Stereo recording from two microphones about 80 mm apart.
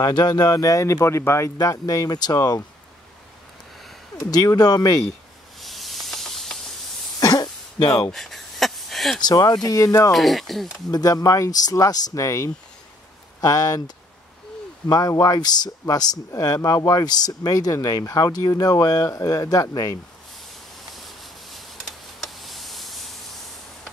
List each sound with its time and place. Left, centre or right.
0.0 s speech: left
4.3 s speech: left
5.6 s hiss: centre
7.2 s cough: left
8.1 s a sound: centre
9.2 s speech: left
10.1 s speech: centre
10.9 s speech: left
20.9 s a sound: centre